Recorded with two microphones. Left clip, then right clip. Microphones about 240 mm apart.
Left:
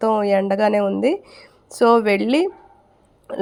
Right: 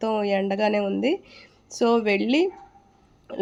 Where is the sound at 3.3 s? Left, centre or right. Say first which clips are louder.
Left 4 dB; centre.